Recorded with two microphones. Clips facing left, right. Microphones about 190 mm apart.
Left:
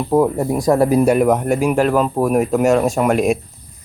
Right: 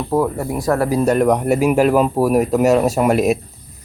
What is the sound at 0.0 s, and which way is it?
Speech, 15° left (ahead or behind).